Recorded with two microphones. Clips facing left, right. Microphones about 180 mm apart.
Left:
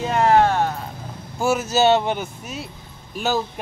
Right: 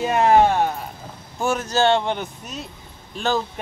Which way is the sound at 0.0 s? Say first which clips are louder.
Right 1 dB; 15° right (ahead or behind).